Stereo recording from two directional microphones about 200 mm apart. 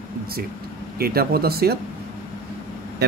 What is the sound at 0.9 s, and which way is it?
Speech, 50° right (ahead or behind).